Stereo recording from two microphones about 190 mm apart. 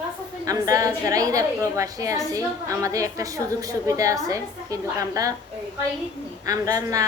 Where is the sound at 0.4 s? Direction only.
20° right (ahead or behind).